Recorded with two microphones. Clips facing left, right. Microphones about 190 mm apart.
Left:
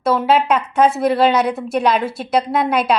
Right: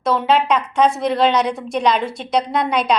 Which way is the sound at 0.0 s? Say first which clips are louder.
Left 1 dB; 5° left (ahead or behind).